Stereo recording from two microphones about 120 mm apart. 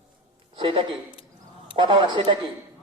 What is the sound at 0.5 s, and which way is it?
A man's voice, 45° right (ahead or behind).